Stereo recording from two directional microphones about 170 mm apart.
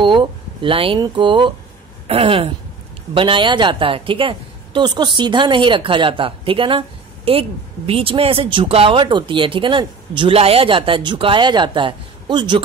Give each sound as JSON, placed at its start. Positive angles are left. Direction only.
{"t": 0.0, "sound": "a woman's voice", "side_deg": -30}